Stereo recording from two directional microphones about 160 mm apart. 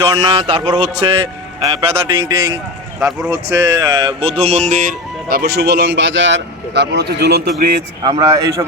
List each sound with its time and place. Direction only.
0.0 s speech: 25° right (ahead or behind)
0.9 s a man's voice: 20° right (ahead or behind)
1.7 s speech: 35° right (ahead or behind)
2.1 s a man's voice: 20° right (ahead or behind)
3.0 s speech: 5° right (ahead or behind)
3.2 s speech: 20° right (ahead or behind); by 5.4 s 55° right (ahead or behind)
5.4 s a man's voice: 90° right
8.0 s a man's voice: 25° right (ahead or behind)